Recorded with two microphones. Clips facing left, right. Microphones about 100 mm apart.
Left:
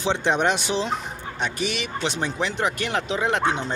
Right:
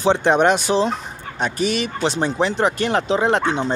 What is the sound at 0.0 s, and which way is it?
Speech, 45° right (ahead or behind).